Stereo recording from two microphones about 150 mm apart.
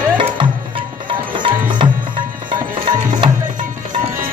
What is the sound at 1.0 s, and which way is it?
Music, 35° right (ahead or behind).